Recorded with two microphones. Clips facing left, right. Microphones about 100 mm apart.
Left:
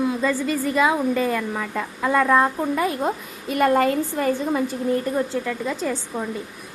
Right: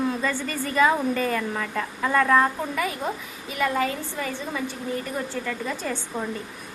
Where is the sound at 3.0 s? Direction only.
45° left (ahead or behind).